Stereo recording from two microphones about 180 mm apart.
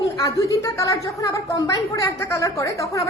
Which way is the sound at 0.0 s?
20° left (ahead or behind).